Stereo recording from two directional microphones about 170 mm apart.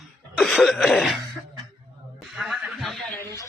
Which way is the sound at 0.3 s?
Centre (ahead or behind).